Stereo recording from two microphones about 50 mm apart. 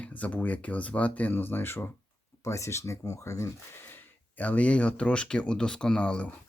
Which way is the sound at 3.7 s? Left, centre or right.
Left.